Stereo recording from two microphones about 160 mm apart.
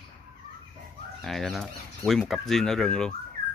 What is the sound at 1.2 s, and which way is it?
Speech, centre (ahead or behind).